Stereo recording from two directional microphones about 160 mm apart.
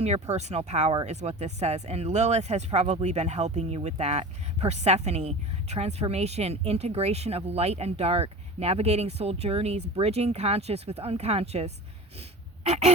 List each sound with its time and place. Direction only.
0.0 s speech: 45° right (ahead or behind)
12.6 s honk: 40° right (ahead or behind)